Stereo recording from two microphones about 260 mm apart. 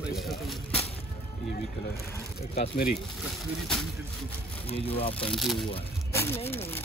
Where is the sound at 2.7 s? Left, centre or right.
Left.